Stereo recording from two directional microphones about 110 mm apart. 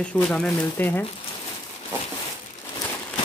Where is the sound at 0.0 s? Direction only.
10° left (ahead or behind).